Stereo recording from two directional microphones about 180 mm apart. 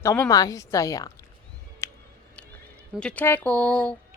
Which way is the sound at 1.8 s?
15° left (ahead or behind).